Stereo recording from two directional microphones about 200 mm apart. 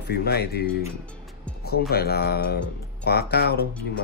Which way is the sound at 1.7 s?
50° left (ahead or behind).